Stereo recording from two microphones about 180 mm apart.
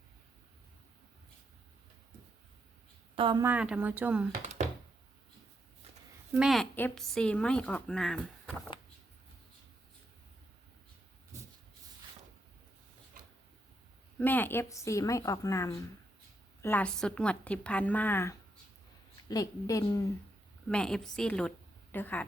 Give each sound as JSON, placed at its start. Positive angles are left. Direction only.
{"t": 3.2, "sound": "speech", "side_deg": -25}
{"t": 3.4, "sound": "speech", "side_deg": -5}
{"t": 6.3, "sound": "speech", "side_deg": 0}
{"t": 14.2, "sound": "speech", "side_deg": 10}
{"t": 20.7, "sound": "speech", "side_deg": 5}